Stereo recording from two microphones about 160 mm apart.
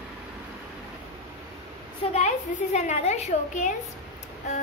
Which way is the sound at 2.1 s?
45° left (ahead or behind).